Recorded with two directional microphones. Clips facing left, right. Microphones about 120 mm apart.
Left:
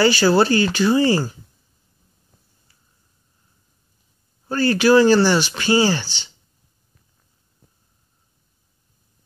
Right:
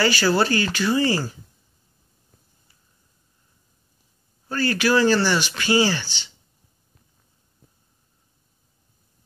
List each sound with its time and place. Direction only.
0.0 s speech: 25° left (ahead or behind)
4.5 s speech: 30° left (ahead or behind)